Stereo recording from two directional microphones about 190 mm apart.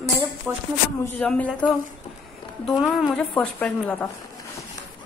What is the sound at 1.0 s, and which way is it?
Speech, 10° left (ahead or behind).